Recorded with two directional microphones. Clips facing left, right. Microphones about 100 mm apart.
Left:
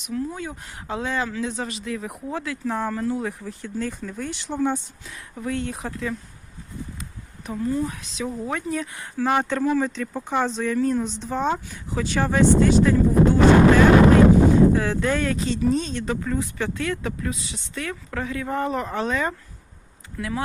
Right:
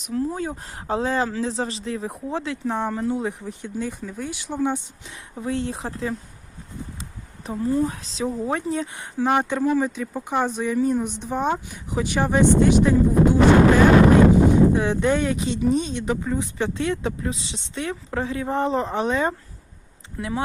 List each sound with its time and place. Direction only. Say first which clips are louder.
0.0 s speech: right 3 dB; 35° right (ahead or behind); by 4.8 s 15° right (ahead or behind)
5.0 s speech: right 2 dB; 25° right (ahead or behind)
7.5 s speech: right 3 dB; 25° right (ahead or behind)
14.7 s speech: right 2 dB; 20° right (ahead or behind)